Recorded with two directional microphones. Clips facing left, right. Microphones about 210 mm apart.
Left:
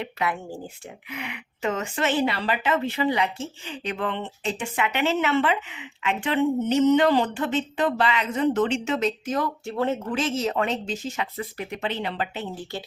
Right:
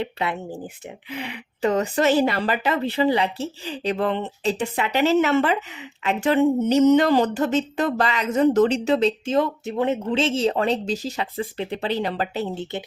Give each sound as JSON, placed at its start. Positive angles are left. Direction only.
{"t": 0.0, "sound": "speech", "side_deg": -25}
{"t": 1.1, "sound": "a woman's voice", "side_deg": -30}
{"t": 12.7, "sound": "speech", "side_deg": -20}